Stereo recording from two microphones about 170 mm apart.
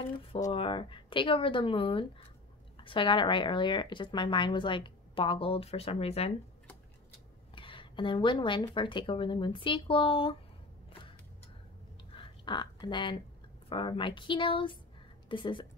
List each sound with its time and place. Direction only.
0.5 s speech: 30° left (ahead or behind)
7.5 s speech: 30° left (ahead or behind)
12.1 s a sound: 30° left (ahead or behind)
13.7 s speech: 30° left (ahead or behind)